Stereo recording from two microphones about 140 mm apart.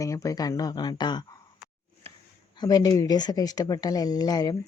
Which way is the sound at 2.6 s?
30° left (ahead or behind).